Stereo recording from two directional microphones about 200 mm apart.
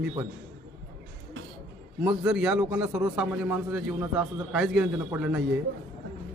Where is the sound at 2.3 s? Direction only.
5° right (ahead or behind).